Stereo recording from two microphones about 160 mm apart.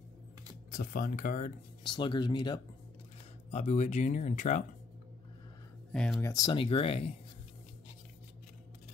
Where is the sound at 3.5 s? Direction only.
45° left (ahead or behind).